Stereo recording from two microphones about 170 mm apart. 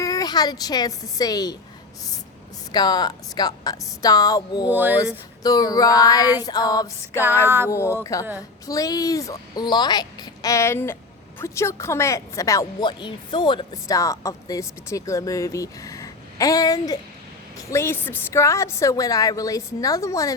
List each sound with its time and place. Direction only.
0.0 s a woman's voice: 20° left (ahead or behind)
2.7 s speech: 25° left (ahead or behind)
4.7 s speech: 10° right (ahead or behind)
5.4 s speech: 20° left (ahead or behind)
7.4 s speech: 15° right (ahead or behind)
8.0 s a woman's voice: 20° left (ahead or behind)